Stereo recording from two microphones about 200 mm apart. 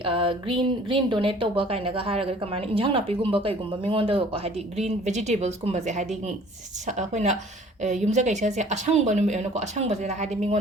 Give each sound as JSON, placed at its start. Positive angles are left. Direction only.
{"t": 0.0, "sound": "speech", "side_deg": -25}